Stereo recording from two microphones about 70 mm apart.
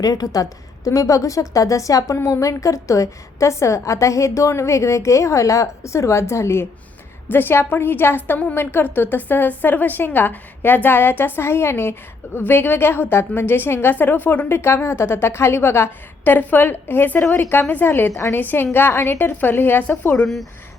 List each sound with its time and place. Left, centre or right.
0.0 s a woman's voice: left
7.3 s a woman's voice: left
18.1 s a woman's voice: left
18.3 s a woman's voice: left
20.2 s speech: centre